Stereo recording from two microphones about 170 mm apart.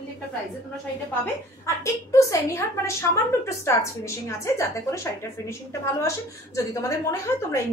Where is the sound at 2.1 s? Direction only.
15° left (ahead or behind).